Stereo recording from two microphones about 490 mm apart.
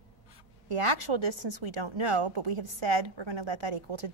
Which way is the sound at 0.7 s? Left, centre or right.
Right.